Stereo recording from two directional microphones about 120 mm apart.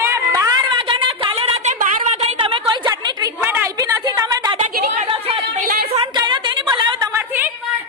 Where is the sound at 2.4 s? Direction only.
40° right (ahead or behind).